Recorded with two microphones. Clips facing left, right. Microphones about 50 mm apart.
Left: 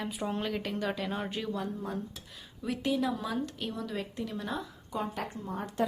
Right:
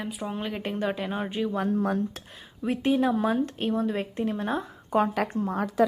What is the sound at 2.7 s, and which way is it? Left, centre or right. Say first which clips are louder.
A woman's voice: right 7 dB; right.